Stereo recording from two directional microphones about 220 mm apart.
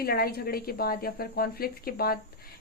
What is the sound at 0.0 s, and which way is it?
A woman's voice, 45° left (ahead or behind).